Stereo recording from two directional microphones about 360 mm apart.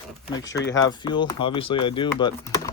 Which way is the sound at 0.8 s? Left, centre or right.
Centre.